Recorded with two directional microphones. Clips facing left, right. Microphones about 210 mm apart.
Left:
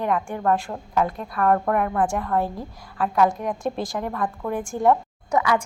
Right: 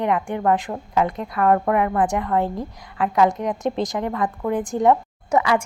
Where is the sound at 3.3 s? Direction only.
20° right (ahead or behind).